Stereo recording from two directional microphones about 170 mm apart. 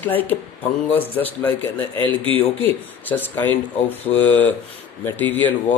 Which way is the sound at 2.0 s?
30° right (ahead or behind).